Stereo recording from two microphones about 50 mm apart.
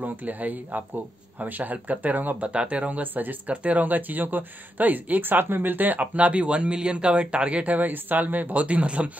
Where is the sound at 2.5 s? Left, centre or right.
Right.